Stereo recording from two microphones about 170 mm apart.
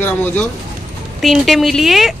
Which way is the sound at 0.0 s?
10° left (ahead or behind).